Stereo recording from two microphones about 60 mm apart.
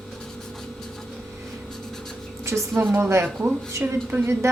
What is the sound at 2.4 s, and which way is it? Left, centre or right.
Speech, right.